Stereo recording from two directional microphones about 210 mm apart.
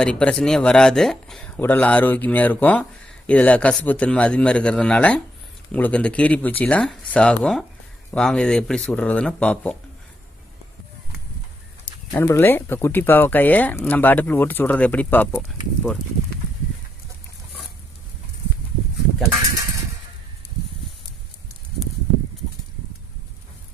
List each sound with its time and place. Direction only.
0.0 s speech: 5° left (ahead or behind)
12.1 s speech: 10° left (ahead or behind)